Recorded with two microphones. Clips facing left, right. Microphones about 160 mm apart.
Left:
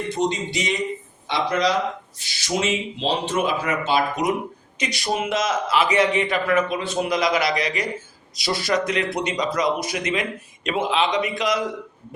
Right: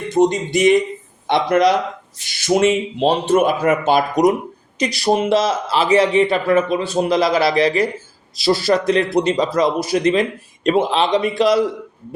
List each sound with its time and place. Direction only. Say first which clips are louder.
0.1 s speech: right 11 dB; 50° right (ahead or behind); by 11.6 s 30° right (ahead or behind)